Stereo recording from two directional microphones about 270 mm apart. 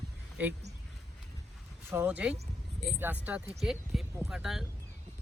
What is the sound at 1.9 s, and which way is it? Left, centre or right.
Speech, centre.